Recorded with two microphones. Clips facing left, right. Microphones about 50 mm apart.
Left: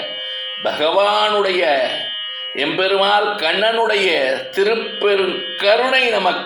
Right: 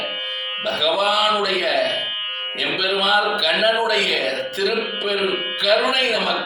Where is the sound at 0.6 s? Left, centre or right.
Left.